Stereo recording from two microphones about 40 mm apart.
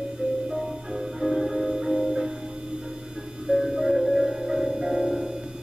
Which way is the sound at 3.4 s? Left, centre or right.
Centre.